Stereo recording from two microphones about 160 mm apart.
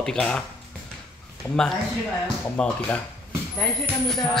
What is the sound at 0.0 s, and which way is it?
Speech, 5° left (ahead or behind).